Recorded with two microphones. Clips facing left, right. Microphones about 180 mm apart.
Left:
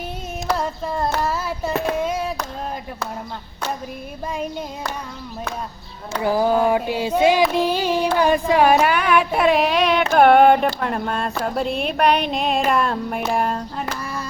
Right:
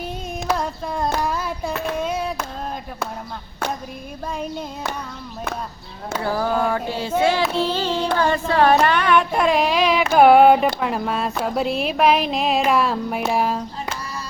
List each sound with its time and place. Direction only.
0.5 s a sound: 5° left (ahead or behind)
1.2 s child singing: 5° left (ahead or behind)
6.2 s female singing: 15° left (ahead or behind); by 10.7 s 5° right (ahead or behind)
10.8 s speech: 5° right (ahead or behind)
13.8 s music: 55° left (ahead or behind)